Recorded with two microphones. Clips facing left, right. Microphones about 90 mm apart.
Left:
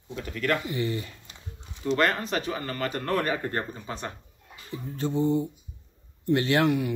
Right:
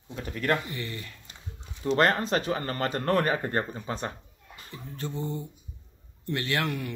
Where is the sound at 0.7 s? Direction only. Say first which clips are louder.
Left 7 dB; 20° left (ahead or behind).